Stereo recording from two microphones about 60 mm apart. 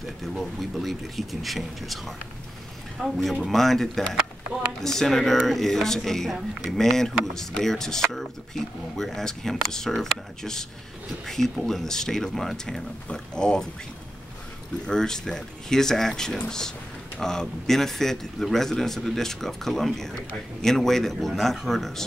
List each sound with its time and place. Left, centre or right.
0.0 s a man's voice: centre
6.3 s speech: centre
6.7 s a man's voice: centre
14.9 s a man's voice: centre